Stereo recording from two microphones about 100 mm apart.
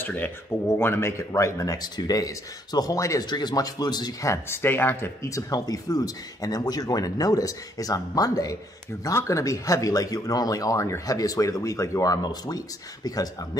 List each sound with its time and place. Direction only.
0.0 s speech: 20° left (ahead or behind)
3.3 s speech: 45° left (ahead or behind)
4.3 s speech: 25° left (ahead or behind)